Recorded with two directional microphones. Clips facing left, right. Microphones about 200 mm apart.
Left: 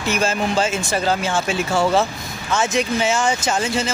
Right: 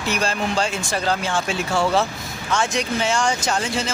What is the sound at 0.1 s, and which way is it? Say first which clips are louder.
Speech: left 3 dB; 5° left (ahead or behind).